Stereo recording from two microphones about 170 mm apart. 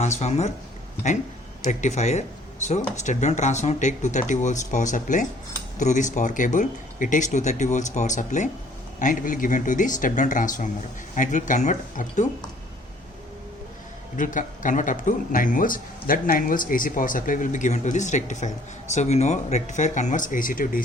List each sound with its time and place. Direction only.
0.0 s speech: 40° left (ahead or behind)
14.2 s speech: 50° left (ahead or behind)